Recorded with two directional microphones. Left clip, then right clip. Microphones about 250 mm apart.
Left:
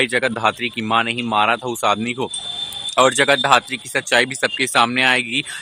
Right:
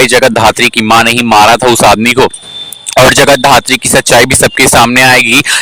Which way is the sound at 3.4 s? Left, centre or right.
Right.